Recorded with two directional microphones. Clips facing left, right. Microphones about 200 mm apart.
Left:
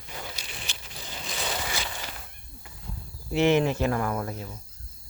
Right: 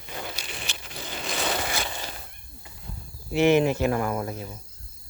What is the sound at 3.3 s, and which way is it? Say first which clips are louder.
Speech: right 2 dB; 10° right (ahead or behind).